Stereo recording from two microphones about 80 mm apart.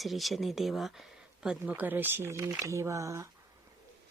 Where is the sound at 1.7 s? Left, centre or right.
Right.